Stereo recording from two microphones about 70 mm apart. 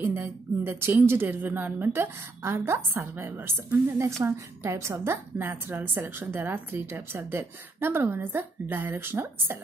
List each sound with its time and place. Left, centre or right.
0.0 s a woman's voice: right